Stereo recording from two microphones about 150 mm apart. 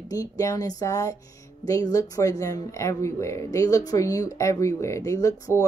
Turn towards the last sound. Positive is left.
turn(degrees=20)  # may be behind; listen again after turning